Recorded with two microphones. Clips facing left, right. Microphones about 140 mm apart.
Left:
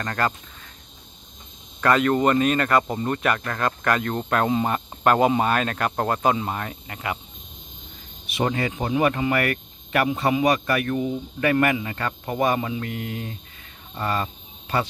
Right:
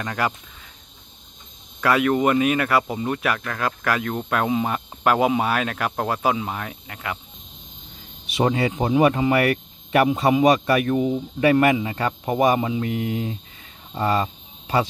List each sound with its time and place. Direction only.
0.0 s speech: 10° right (ahead or behind)
1.8 s speech: 5° right (ahead or behind)
8.5 s speech: 15° right (ahead or behind)
13.9 s a sound: 15° right (ahead or behind)